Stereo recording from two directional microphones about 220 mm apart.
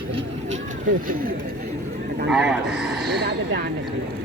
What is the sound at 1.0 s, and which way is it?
Speech, 40° right (ahead or behind).